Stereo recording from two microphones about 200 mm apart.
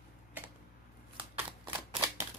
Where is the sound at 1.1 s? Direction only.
25° right (ahead or behind).